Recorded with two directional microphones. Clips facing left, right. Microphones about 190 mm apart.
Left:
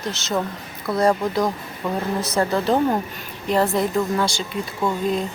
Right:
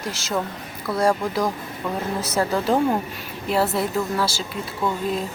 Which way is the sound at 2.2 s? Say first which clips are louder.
Even; 10° right (ahead or behind).